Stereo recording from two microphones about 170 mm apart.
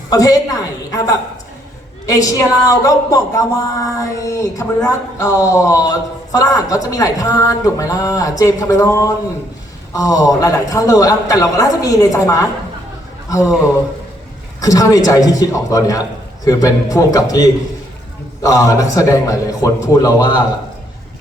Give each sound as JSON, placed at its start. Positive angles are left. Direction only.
{"t": 0.1, "sound": "a woman's voice", "side_deg": 20}
{"t": 2.0, "sound": "speech", "side_deg": 20}
{"t": 14.6, "sound": "speech", "side_deg": 20}